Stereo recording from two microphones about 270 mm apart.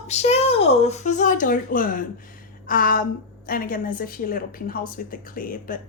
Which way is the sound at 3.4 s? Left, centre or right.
Left.